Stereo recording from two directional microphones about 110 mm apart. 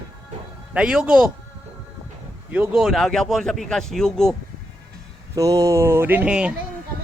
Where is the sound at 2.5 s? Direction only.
10° right (ahead or behind).